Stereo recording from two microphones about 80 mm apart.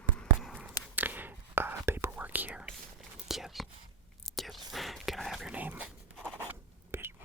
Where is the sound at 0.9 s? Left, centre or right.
Right.